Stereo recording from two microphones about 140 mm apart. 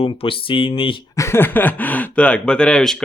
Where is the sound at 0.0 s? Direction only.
40° left (ahead or behind).